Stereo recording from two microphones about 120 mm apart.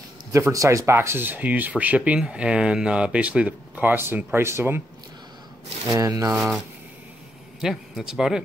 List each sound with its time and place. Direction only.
0.3 s speech: 25° right (ahead or behind)
5.9 s speech: 30° right (ahead or behind)
6.3 s a man's voice: 5° right (ahead or behind)
7.6 s a man's voice: 5° right (ahead or behind)